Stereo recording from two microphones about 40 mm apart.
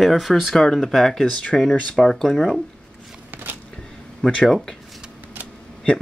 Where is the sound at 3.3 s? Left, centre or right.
Right.